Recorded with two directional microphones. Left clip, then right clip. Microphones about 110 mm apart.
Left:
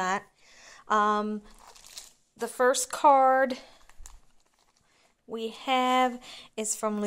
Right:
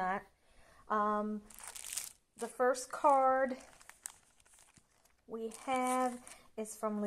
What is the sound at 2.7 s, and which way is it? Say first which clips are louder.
Speech: left 8 dB; 40° left (ahead or behind).